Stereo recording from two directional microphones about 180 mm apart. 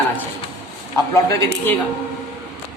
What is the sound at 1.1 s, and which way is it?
Speech, 15° left (ahead or behind).